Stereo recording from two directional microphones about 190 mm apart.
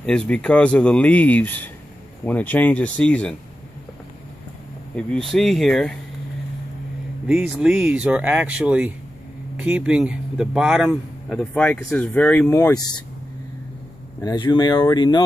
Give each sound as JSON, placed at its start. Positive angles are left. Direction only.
{"t": 0.0, "sound": "speech", "side_deg": 5}
{"t": 4.9, "sound": "speech", "side_deg": 0}
{"t": 7.2, "sound": "speech", "side_deg": -5}
{"t": 11.2, "sound": "speech", "side_deg": 5}
{"t": 14.2, "sound": "speech", "side_deg": 25}